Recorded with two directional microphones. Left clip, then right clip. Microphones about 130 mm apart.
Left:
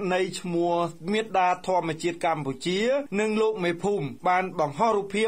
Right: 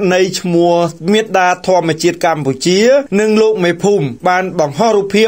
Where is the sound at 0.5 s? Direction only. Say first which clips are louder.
Right 13 dB; 20° right (ahead or behind).